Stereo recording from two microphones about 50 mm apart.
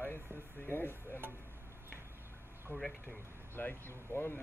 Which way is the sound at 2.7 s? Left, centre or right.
Right.